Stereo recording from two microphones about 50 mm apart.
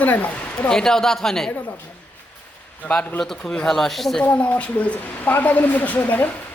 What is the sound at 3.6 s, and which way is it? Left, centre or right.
Speech, centre.